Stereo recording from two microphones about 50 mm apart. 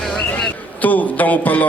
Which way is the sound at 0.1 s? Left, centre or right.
Left.